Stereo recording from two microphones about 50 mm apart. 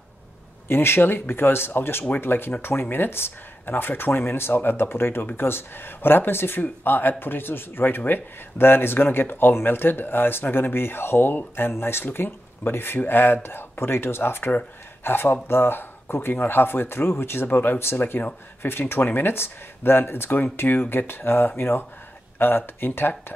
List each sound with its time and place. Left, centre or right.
0.7 s speech: left
21.1 s speech: left